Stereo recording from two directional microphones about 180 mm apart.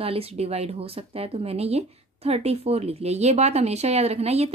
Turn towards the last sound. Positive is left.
turn(degrees=-35)  # may be behind; listen again after turning